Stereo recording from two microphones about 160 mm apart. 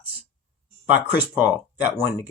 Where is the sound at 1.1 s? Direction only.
10° right (ahead or behind).